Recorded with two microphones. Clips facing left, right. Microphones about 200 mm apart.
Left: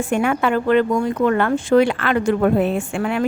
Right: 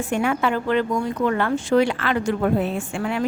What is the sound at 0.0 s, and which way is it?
Speech, 55° left (ahead or behind).